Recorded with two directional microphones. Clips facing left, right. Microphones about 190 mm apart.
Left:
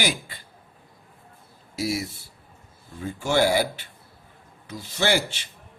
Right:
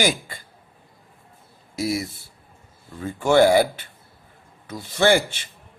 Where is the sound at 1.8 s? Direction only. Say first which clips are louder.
Right 2 dB; 50° right (ahead or behind).